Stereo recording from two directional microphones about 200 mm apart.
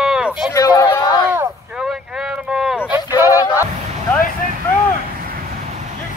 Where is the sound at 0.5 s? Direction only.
20° left (ahead or behind).